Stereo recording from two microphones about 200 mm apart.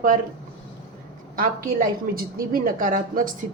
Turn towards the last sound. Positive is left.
turn(degrees=-45)  # may be behind; listen again after turning